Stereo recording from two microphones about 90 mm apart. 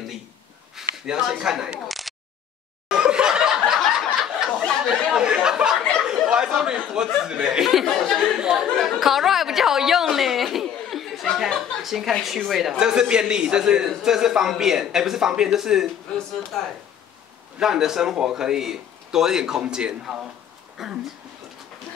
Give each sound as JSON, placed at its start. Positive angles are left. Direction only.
{"t": 0.7, "sound": "speech", "side_deg": -5}
{"t": 2.9, "sound": "chuckle", "side_deg": -10}
{"t": 4.5, "sound": "a sound", "side_deg": 5}
{"t": 4.8, "sound": "chatter", "side_deg": -10}
{"t": 7.2, "sound": "chuckle", "side_deg": -10}
{"t": 8.6, "sound": "speech", "side_deg": 5}
{"t": 16.5, "sound": "speech", "side_deg": 5}
{"t": 17.6, "sound": "a man's voice", "side_deg": -5}